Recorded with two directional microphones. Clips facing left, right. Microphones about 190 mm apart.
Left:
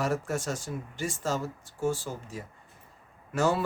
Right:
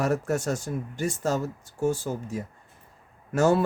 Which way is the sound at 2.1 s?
45° right (ahead or behind).